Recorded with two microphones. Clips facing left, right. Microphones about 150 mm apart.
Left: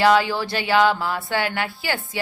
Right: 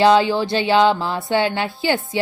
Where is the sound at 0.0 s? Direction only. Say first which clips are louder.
Right 3 dB; 25° right (ahead or behind).